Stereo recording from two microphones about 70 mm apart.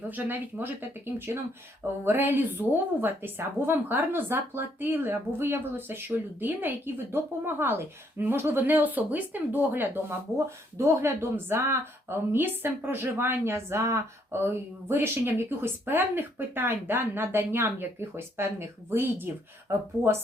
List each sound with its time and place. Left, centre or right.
0.1 s a woman's voice: right
10.3 s speech: right